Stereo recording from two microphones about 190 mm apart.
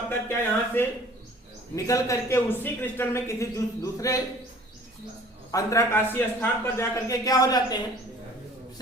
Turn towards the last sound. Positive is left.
turn(degrees=20)  # may be behind; listen again after turning